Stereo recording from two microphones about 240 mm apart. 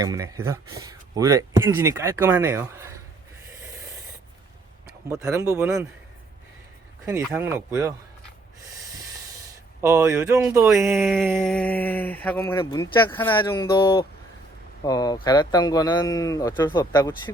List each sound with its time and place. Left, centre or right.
0.0 s speech: centre
4.9 s a sound: centre
5.2 s speech: centre
7.3 s speech: centre
9.8 s speech: centre
10.9 s a sound: centre
11.3 s speech: centre